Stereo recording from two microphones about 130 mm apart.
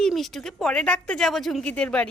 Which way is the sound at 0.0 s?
Centre (ahead or behind).